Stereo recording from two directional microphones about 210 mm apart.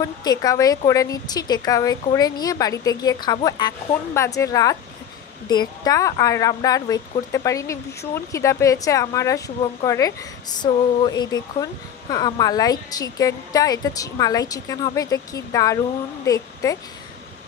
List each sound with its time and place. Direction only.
0.0 s speech: 20° left (ahead or behind)